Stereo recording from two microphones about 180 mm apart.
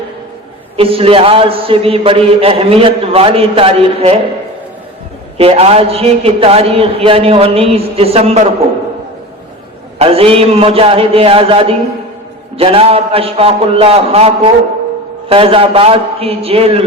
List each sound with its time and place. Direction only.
0.8 s a man's voice: 30° right (ahead or behind)
5.4 s a man's voice: 35° right (ahead or behind)
10.0 s a man's voice: 35° right (ahead or behind)